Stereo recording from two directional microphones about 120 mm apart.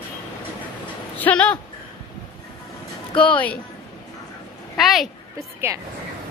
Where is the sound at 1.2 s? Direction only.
15° left (ahead or behind).